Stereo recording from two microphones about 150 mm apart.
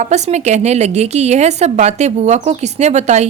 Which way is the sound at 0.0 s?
50° right (ahead or behind).